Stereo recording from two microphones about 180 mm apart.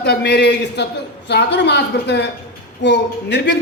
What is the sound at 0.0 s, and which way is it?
A man's voice, 65° left (ahead or behind).